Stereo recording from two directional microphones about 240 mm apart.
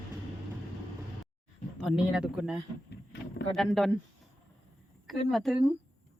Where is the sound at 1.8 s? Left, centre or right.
Centre.